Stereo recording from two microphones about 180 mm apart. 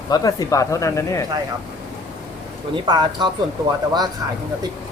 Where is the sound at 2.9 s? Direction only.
25° right (ahead or behind).